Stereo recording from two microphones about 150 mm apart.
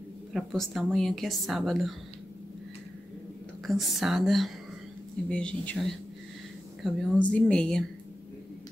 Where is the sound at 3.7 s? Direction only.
Centre (ahead or behind).